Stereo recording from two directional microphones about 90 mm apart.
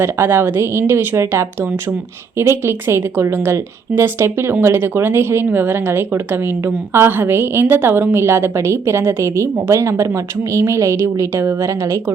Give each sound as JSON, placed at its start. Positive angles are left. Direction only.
{"t": 0.0, "sound": "a woman's voice", "side_deg": -25}